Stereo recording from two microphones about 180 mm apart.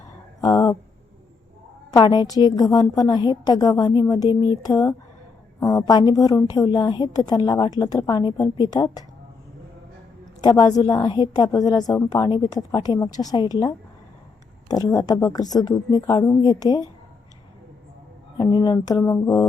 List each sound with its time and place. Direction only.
0.4 s a sound: 20° left (ahead or behind)
1.9 s a woman's voice: 20° left (ahead or behind)
10.4 s a woman's voice: 20° left (ahead or behind)
18.3 s a woman's voice: 25° left (ahead or behind)